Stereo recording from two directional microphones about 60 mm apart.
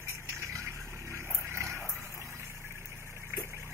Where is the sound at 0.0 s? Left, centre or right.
Right.